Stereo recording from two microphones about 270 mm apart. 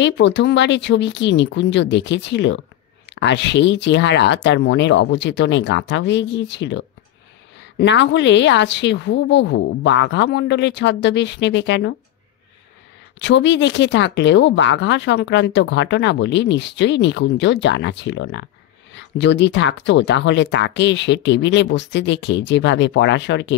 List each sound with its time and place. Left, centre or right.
0.0 s speech: left
7.8 s speech: left
13.2 s speech: left